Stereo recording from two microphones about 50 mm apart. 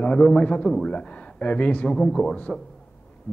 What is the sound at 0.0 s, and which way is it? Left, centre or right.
A man's voice, left.